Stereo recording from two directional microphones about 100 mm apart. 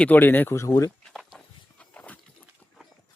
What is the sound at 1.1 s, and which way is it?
Walk, centre (ahead or behind).